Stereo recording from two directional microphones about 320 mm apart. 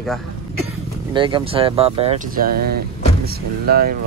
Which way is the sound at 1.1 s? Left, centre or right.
Centre.